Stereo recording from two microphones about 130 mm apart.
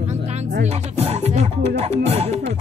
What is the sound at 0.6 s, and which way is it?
Speech, 55° right (ahead or behind).